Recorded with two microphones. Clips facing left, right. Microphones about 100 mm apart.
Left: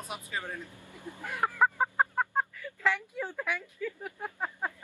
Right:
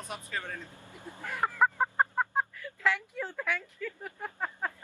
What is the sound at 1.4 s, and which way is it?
Chicken, 10° left (ahead or behind).